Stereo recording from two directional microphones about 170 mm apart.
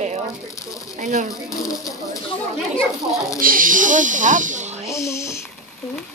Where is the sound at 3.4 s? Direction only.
55° right (ahead or behind).